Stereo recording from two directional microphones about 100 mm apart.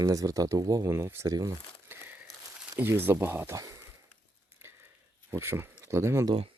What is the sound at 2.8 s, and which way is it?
Speech, 20° right (ahead or behind).